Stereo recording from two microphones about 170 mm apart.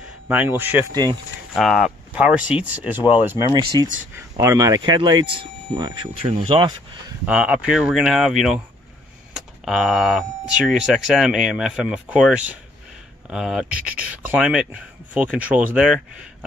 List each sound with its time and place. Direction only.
0.3 s speech: 10° right (ahead or behind)
1.5 s speech: centre (ahead or behind); by 6.7 s 30° right (ahead or behind)
7.2 s speech: 5° right (ahead or behind)
9.7 s speech: centre (ahead or behind)